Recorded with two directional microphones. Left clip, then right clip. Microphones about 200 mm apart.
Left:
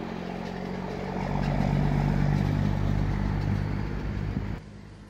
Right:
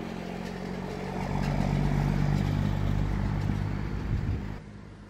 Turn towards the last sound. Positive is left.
turn(degrees=-25)  # may be behind; listen again after turning